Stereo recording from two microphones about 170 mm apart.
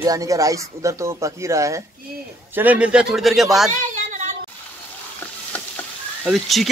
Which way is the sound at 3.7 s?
45° right (ahead or behind).